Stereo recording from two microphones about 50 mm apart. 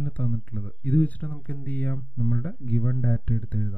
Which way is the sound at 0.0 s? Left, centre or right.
Left.